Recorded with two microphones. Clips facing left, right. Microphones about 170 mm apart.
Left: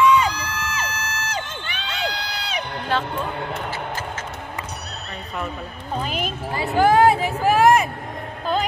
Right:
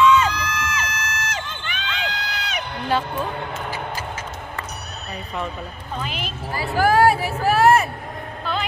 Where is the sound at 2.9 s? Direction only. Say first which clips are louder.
Right 1 dB; 10° right (ahead or behind).